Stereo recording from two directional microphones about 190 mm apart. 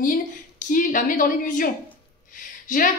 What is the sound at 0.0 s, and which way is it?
A woman's voice, 45° left (ahead or behind).